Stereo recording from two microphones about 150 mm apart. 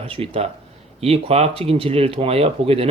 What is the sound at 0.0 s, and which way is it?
Speech, 40° right (ahead or behind).